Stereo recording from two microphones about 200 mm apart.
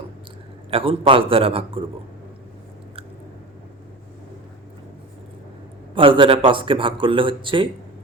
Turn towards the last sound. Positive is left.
turn(degrees=-25)  # may be behind; listen again after turning